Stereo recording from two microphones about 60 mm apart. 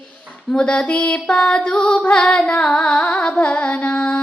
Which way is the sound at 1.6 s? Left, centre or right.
Centre.